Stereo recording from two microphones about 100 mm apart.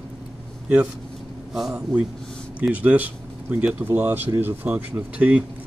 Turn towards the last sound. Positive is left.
turn(degrees=-10)  # may be behind; listen again after turning